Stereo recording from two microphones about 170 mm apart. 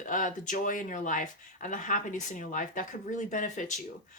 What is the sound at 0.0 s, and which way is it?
Speech, 50° left (ahead or behind).